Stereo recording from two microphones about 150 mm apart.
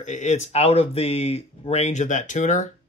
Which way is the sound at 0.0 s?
55° left (ahead or behind).